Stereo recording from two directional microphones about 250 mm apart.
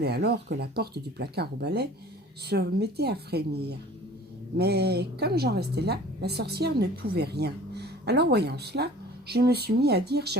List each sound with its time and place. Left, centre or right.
0.0 s a woman's voice: right